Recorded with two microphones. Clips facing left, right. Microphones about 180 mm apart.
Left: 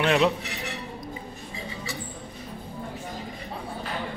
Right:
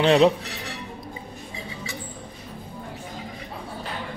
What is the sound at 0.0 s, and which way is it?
Speech, 30° right (ahead or behind).